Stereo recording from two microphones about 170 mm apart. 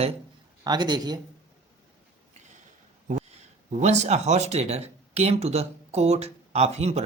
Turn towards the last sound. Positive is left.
turn(degrees=-40)  # may be behind; listen again after turning